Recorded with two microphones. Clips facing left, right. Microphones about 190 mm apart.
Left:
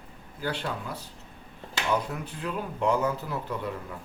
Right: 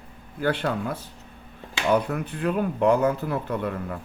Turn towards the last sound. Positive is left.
turn(degrees=-60)  # may be behind; listen again after turning